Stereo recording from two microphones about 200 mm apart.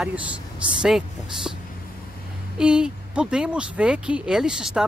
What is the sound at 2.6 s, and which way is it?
Speech, 5° right (ahead or behind).